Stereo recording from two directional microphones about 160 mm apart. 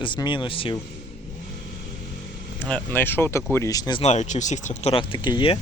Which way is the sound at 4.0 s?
45° left (ahead or behind).